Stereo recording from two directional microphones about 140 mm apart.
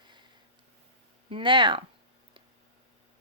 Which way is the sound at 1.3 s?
35° right (ahead or behind).